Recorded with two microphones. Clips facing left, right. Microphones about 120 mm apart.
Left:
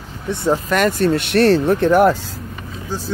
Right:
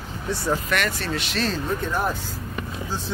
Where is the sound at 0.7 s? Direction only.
45° left (ahead or behind); by 2.2 s 85° left.